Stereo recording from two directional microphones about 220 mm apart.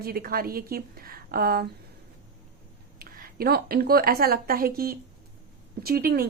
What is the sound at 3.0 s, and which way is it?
A woman's voice, 45° right (ahead or behind).